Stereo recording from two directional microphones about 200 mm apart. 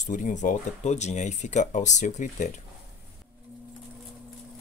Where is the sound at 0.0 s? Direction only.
40° left (ahead or behind).